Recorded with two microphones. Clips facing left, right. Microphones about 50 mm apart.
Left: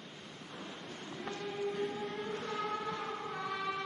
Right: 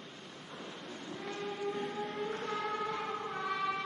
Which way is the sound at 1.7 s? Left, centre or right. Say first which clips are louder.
Even; centre.